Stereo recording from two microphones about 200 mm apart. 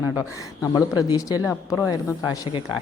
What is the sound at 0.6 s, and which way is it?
A woman's voice, 20° left (ahead or behind).